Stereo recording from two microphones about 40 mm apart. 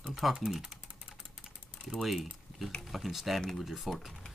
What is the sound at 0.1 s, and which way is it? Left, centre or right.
Typing, centre.